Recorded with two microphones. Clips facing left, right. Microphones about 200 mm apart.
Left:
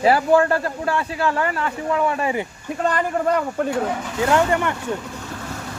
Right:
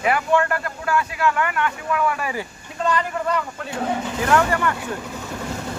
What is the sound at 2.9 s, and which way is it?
Speech, 50° left (ahead or behind).